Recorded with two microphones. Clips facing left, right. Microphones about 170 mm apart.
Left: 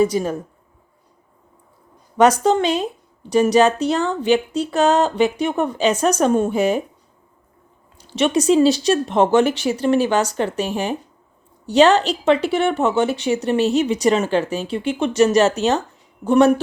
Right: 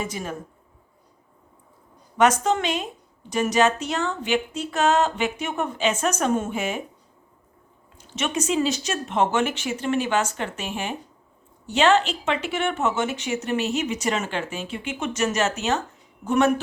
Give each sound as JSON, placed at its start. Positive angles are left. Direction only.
{"t": 0.0, "sound": "speech", "side_deg": 35}
{"t": 2.1, "sound": "speech", "side_deg": 35}
{"t": 7.9, "sound": "speech", "side_deg": 35}